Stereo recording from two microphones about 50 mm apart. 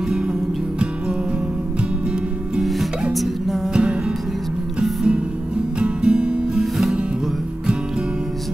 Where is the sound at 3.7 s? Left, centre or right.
Centre.